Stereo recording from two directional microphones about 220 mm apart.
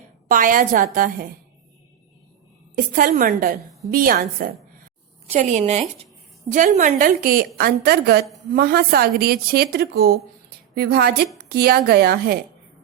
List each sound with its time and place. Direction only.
0.3 s a woman's voice: 40° right (ahead or behind)
2.7 s a woman's voice: 40° right (ahead or behind)